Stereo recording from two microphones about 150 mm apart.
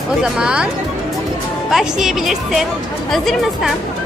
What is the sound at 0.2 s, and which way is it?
Speech, 5° right (ahead or behind).